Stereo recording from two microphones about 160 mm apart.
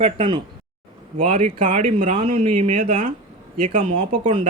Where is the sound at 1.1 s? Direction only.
50° right (ahead or behind).